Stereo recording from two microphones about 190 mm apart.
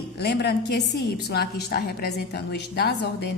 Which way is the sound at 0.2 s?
60° left (ahead or behind).